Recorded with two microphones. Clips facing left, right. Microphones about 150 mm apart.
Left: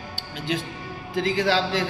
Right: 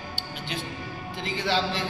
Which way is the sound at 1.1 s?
90° left.